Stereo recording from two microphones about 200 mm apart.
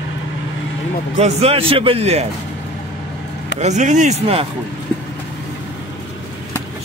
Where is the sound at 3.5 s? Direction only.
35° right (ahead or behind).